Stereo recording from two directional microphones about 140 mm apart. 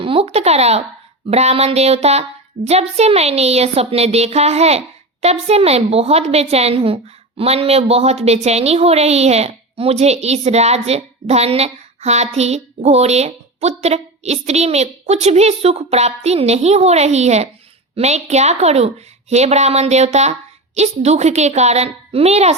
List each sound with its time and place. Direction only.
0.0 s a woman's voice: 40° right (ahead or behind)